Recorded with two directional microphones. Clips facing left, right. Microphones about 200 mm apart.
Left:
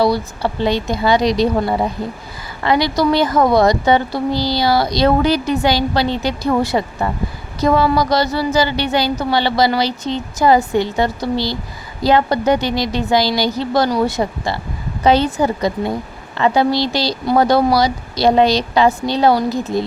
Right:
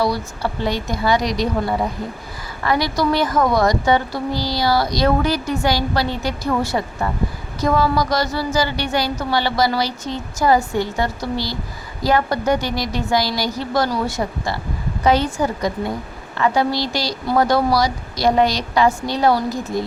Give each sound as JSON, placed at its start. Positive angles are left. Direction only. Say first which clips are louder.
{"t": 0.0, "sound": "a woman's voice", "louder": "left 4 dB", "side_deg": 25}